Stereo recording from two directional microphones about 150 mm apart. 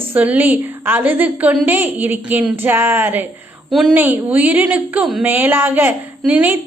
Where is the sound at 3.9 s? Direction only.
15° right (ahead or behind).